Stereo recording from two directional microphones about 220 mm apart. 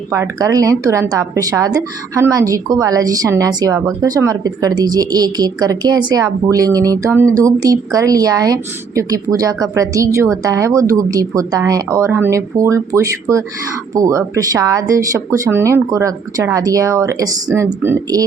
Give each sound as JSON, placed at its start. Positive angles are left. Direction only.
{"t": 0.1, "sound": "a woman's voice", "side_deg": -15}